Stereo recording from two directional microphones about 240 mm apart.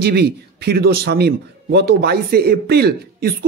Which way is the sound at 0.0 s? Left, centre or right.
Right.